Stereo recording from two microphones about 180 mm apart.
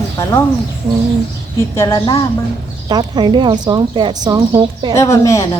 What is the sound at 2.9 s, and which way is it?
Speech, 25° right (ahead or behind).